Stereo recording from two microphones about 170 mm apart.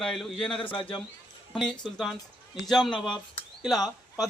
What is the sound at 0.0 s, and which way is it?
Speech, centre (ahead or behind).